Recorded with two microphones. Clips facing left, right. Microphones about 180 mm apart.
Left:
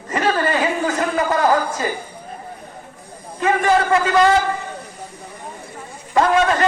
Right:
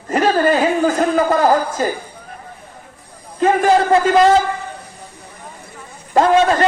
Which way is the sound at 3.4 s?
35° right (ahead or behind).